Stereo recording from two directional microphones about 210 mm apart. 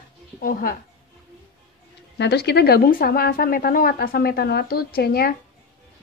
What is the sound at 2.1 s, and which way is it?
A woman's voice, 55° left (ahead or behind).